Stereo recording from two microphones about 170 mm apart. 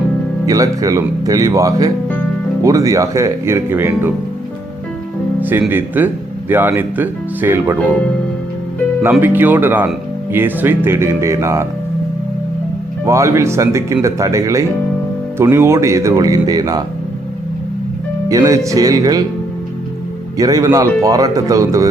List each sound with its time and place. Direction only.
0.4 s speech: 20° right (ahead or behind)
5.4 s speech: 10° right (ahead or behind)
9.0 s speech: 10° right (ahead or behind)
13.1 s speech: 15° right (ahead or behind)
18.3 s speech: 20° right (ahead or behind)
20.4 s speech: 20° right (ahead or behind)